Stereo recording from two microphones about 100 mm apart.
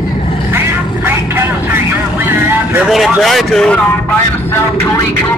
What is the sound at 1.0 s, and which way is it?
Vehicle, 20° right (ahead or behind).